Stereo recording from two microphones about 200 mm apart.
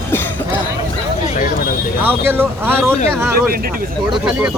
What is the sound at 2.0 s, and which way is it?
Speech, 10° right (ahead or behind).